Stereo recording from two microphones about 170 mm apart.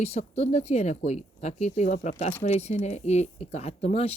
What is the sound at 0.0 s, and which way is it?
Speech, 40° left (ahead or behind).